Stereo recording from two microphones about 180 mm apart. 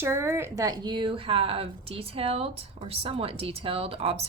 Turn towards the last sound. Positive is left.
turn(degrees=-30)  # may be behind; listen again after turning